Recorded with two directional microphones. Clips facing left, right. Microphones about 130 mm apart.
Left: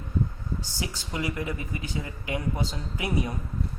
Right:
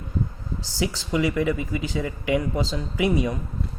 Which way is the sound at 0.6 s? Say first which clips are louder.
Right 8 dB; 90° right.